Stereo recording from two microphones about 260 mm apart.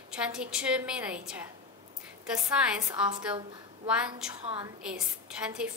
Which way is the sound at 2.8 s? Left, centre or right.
Centre.